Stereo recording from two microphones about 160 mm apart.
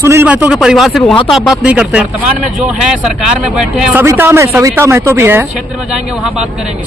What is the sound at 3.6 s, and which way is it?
Speech, 10° right (ahead or behind).